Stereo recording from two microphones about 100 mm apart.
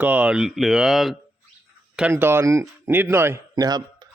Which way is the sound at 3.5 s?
40° right (ahead or behind).